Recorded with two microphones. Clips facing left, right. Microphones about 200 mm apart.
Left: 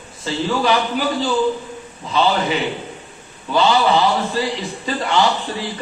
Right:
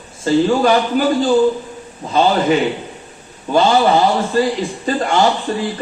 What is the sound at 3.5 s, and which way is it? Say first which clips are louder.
A man's voice: right 3 dB; 50° right (ahead or behind).